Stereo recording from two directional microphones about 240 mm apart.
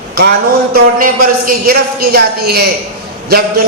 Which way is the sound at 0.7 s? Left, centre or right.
Right.